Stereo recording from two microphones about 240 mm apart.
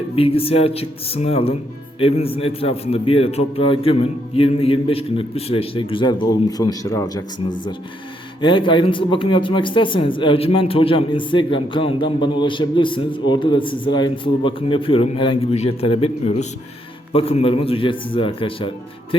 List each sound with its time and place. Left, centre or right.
0.2 s speech: left
8.4 s speech: centre